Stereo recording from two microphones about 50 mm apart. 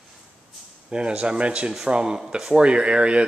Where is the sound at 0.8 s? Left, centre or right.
Centre.